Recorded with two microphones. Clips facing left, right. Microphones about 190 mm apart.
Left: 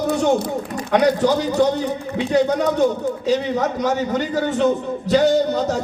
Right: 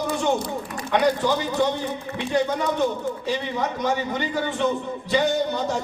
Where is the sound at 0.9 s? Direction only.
45° left (ahead or behind).